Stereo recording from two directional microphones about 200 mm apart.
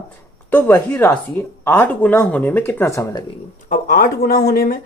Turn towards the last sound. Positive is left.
turn(degrees=50)  # may be behind; listen again after turning